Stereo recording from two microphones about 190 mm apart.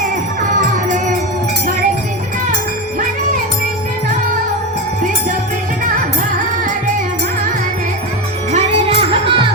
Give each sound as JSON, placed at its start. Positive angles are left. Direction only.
{"t": 8.5, "sound": "music", "side_deg": -30}